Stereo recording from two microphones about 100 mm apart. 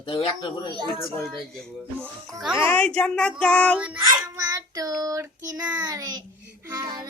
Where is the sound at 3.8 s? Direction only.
10° right (ahead or behind).